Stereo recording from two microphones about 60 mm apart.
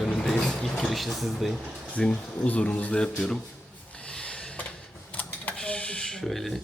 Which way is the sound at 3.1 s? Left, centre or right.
Centre.